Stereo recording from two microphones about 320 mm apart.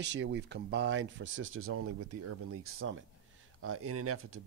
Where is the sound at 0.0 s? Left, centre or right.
Right.